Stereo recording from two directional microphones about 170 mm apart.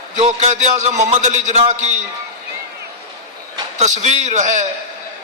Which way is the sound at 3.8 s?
45° right (ahead or behind).